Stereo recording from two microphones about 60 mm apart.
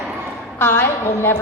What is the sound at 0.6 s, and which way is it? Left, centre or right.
Speech, left.